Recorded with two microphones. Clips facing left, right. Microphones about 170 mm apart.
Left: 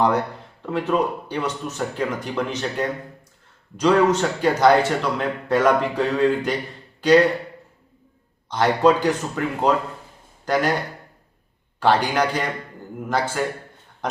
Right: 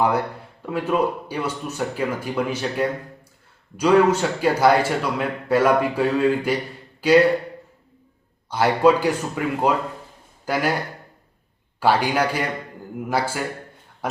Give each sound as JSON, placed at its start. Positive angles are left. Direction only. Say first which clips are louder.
{"t": 0.6, "sound": "speech", "louder": "even", "side_deg": -10}
{"t": 8.4, "sound": "speech", "louder": "even", "side_deg": -10}
{"t": 11.8, "sound": "speech", "louder": "even", "side_deg": -10}
{"t": 14.0, "sound": "a sound", "louder": "even", "side_deg": -5}